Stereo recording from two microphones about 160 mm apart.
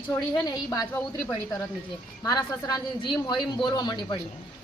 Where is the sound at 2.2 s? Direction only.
25° left (ahead or behind).